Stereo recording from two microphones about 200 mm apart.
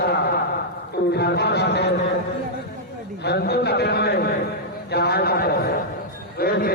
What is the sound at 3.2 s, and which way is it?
A man's voice, 55° left (ahead or behind).